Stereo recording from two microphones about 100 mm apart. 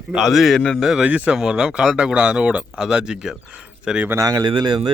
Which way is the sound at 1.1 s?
15° right (ahead or behind).